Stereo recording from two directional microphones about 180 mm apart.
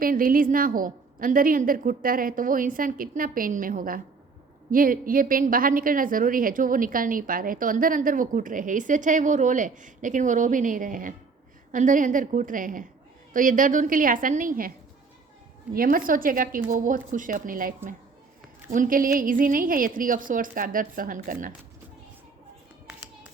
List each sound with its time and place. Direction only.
0.0 s a woman's voice: 50° right (ahead or behind)
15.7 s a woman's voice: 50° right (ahead or behind)